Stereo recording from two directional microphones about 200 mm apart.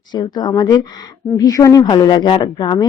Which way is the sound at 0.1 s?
20° left (ahead or behind).